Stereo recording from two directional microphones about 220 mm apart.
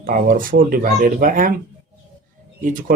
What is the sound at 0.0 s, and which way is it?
Speech, 40° right (ahead or behind).